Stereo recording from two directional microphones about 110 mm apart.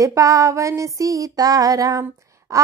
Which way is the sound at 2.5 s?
30° right (ahead or behind).